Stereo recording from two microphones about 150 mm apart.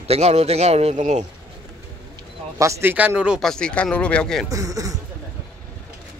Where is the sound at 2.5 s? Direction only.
20° right (ahead or behind).